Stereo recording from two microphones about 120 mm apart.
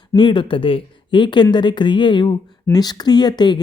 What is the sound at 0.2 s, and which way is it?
Speech, 40° left (ahead or behind).